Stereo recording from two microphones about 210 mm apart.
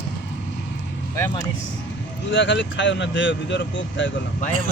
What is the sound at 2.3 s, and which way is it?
Speech, 60° left (ahead or behind).